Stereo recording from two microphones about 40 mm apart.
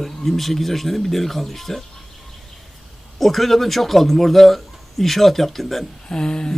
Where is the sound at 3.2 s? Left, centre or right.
Centre.